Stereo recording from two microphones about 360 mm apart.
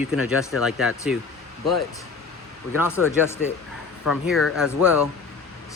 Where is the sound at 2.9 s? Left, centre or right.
Centre.